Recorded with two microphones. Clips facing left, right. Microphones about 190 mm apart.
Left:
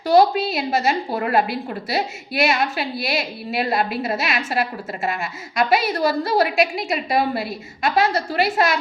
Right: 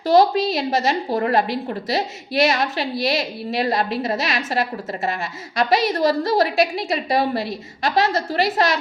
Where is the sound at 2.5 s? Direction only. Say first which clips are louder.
Even; 35° right (ahead or behind).